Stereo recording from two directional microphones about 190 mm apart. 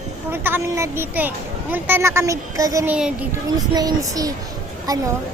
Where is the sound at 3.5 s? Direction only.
20° right (ahead or behind).